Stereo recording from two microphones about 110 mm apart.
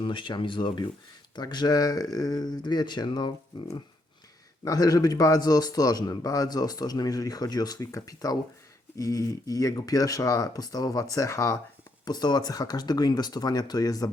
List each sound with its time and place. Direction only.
0.0 s a man's voice: 45° left (ahead or behind)